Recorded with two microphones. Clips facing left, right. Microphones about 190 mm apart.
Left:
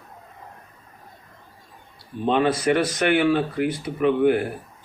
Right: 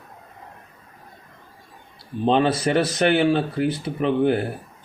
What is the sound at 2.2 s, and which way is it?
Speech, 30° right (ahead or behind).